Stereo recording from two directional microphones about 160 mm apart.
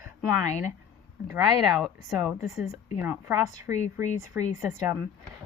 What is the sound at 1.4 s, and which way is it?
Speech, centre (ahead or behind).